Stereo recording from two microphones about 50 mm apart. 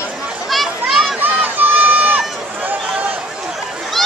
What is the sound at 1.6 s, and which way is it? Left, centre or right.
Crowd, right.